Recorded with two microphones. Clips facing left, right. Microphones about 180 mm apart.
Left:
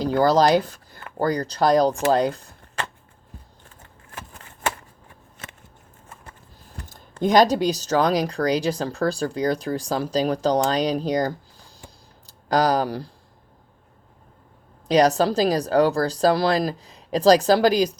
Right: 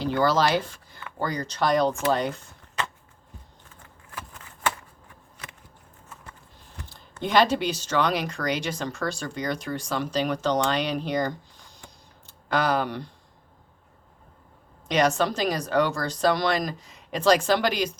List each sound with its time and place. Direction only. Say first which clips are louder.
0.0 s speech: left 5 dB; 40° left (ahead or behind)
6.2 s a sound: left 2 dB; 40° left (ahead or behind)
7.2 s speech: left 5 dB; 40° left (ahead or behind)
14.8 s speech: left 5 dB; 35° left (ahead or behind)